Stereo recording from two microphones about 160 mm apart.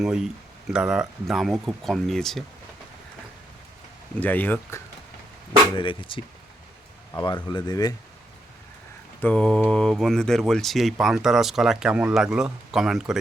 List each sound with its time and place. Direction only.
0.0 s speech: 5° right (ahead or behind)
4.2 s speech: 10° left (ahead or behind)
5.7 s speech: 30° left (ahead or behind)
9.2 s speech: 5° left (ahead or behind)